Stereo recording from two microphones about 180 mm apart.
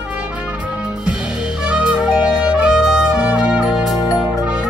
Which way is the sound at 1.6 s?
5° right (ahead or behind).